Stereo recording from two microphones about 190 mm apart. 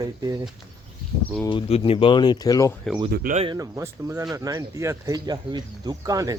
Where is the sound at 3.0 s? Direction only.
50° right (ahead or behind).